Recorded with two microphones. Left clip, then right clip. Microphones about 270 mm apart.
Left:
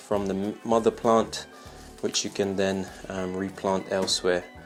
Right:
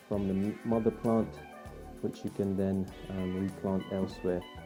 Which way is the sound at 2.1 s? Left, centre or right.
Centre.